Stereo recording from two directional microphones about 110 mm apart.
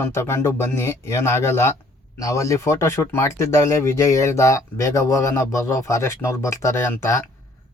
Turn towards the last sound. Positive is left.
turn(degrees=25)  # may be behind; listen again after turning